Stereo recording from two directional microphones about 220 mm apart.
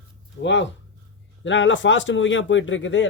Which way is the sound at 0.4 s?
55° left (ahead or behind).